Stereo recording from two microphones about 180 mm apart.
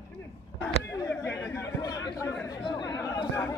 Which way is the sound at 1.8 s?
20° left (ahead or behind).